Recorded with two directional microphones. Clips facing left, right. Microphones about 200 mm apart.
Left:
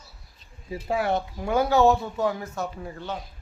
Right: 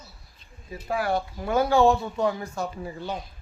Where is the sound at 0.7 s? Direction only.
25° left (ahead or behind).